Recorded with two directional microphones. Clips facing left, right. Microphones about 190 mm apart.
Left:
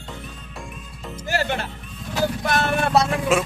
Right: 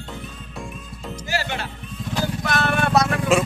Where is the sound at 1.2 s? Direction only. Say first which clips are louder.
Left 3 dB; 50° left (ahead or behind).